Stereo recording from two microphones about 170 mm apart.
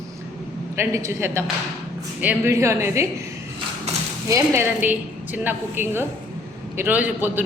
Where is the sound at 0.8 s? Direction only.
15° right (ahead or behind).